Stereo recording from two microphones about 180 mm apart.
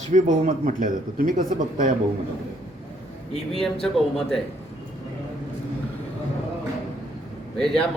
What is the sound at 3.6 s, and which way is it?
Speech, centre (ahead or behind).